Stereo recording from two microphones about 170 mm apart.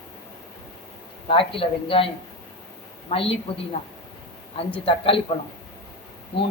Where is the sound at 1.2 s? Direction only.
30° left (ahead or behind).